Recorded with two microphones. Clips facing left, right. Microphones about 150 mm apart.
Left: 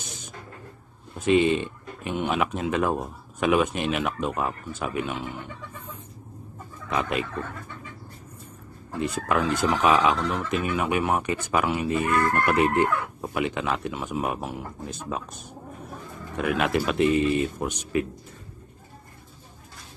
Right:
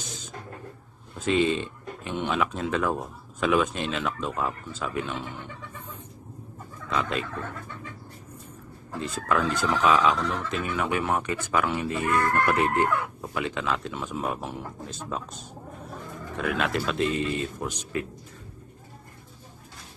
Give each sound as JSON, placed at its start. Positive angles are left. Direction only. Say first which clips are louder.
{"t": 1.2, "sound": "speech", "louder": "left 3 dB", "side_deg": 20}
{"t": 6.9, "sound": "speech", "louder": "left 2 dB", "side_deg": 15}
{"t": 9.0, "sound": "speech", "louder": "left 1 dB", "side_deg": 15}